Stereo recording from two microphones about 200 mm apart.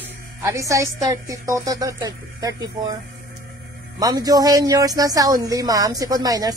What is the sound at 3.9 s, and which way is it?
A man's voice, 20° right (ahead or behind).